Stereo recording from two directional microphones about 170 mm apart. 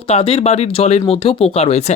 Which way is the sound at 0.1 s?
35° left (ahead or behind).